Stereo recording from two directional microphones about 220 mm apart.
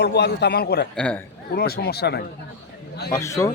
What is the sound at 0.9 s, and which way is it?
Speech, 5° left (ahead or behind).